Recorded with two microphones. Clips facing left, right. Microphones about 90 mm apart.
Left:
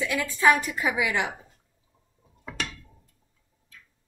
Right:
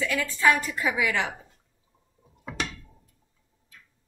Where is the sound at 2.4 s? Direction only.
10° right (ahead or behind).